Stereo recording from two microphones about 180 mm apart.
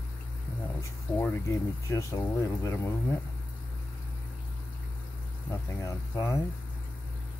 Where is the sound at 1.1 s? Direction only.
15° left (ahead or behind).